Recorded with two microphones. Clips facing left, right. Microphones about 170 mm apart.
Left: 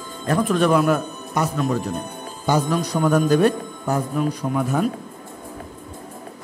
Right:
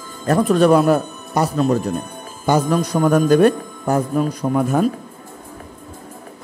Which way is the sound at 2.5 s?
50° right (ahead or behind).